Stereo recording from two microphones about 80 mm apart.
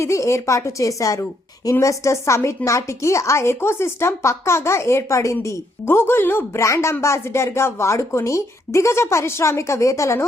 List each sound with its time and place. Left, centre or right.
0.0 s a woman's voice: left